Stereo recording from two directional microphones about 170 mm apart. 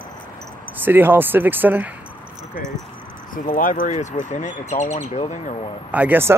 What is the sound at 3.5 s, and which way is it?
Speech, 55° left (ahead or behind).